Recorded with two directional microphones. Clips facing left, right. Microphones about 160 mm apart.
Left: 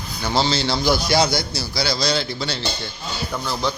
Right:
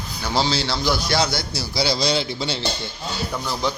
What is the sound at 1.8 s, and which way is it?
Speech, 25° right (ahead or behind).